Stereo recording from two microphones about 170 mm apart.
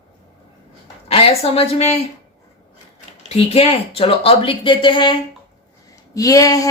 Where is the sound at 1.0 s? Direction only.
35° left (ahead or behind).